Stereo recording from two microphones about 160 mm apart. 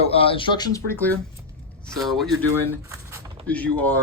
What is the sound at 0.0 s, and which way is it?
Speech, 35° left (ahead or behind).